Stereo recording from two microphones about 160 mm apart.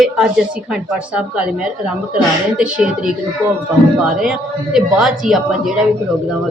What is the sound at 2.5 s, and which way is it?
Speech, 5° right (ahead or behind).